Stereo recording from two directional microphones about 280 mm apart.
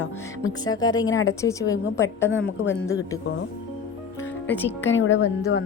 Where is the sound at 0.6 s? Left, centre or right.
Centre.